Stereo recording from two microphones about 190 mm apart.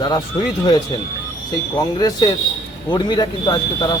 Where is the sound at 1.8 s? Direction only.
20° left (ahead or behind).